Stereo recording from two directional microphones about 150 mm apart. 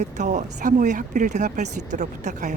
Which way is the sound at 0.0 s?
50° right (ahead or behind).